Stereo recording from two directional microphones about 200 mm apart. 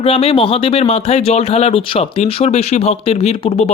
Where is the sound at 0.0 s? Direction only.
30° left (ahead or behind).